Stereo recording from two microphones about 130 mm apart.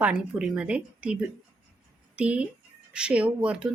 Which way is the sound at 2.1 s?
10° right (ahead or behind).